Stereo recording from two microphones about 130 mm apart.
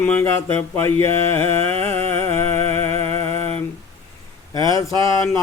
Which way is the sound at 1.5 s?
50° right (ahead or behind).